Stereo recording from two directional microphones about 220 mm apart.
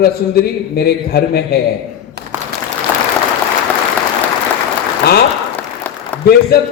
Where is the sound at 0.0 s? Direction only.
45° left (ahead or behind).